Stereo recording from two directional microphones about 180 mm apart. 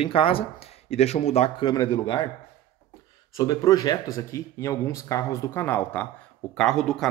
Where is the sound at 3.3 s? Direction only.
20° left (ahead or behind).